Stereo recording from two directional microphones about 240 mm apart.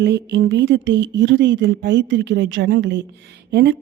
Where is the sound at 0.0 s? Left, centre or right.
Right.